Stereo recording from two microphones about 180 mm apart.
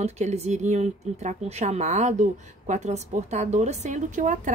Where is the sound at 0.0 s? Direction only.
40° right (ahead or behind).